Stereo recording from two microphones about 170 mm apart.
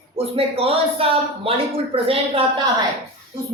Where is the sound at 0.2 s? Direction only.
35° right (ahead or behind).